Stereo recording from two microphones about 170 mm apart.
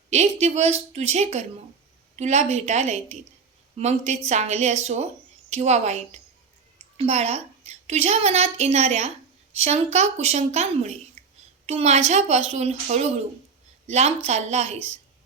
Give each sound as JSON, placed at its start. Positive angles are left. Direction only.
{"t": 0.1, "sound": "a woman's voice", "side_deg": -40}